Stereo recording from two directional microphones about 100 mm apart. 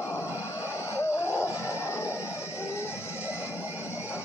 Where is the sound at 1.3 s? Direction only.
20° right (ahead or behind).